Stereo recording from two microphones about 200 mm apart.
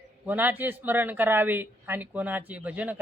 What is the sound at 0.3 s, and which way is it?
Speech, 10° right (ahead or behind).